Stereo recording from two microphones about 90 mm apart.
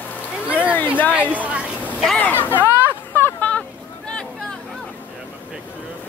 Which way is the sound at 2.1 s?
20° left (ahead or behind).